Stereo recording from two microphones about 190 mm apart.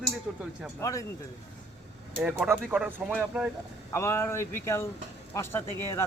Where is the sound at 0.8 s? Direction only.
15° left (ahead or behind).